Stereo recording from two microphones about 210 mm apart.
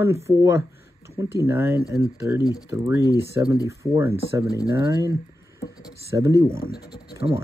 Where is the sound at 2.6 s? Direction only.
15° right (ahead or behind).